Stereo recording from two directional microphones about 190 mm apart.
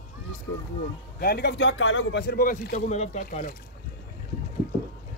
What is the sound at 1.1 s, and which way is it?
A man's voice, 55° left (ahead or behind).